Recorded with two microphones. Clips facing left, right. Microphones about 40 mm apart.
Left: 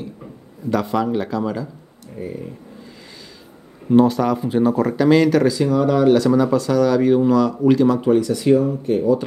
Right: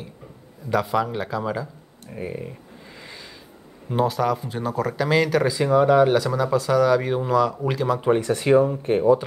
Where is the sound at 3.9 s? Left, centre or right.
Centre.